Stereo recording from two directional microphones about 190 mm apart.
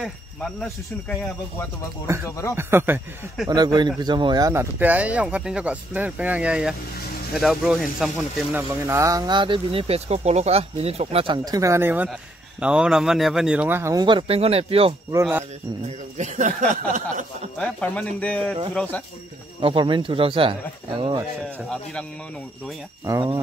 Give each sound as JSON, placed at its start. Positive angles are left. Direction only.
{"t": 0.0, "sound": "speech", "side_deg": 5}
{"t": 2.2, "sound": "speech", "side_deg": 15}
{"t": 2.5, "sound": "speech", "side_deg": -10}
{"t": 3.5, "sound": "speech", "side_deg": -20}
{"t": 8.8, "sound": "speech", "side_deg": -15}
{"t": 15.0, "sound": "speech", "side_deg": -15}
{"t": 16.2, "sound": "speech", "side_deg": -40}
{"t": 17.6, "sound": "speech", "side_deg": 5}
{"t": 19.6, "sound": "speech", "side_deg": -25}
{"t": 23.0, "sound": "speech", "side_deg": -20}